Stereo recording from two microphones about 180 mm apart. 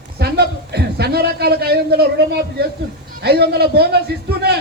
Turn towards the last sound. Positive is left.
turn(degrees=-65)  # may be behind; listen again after turning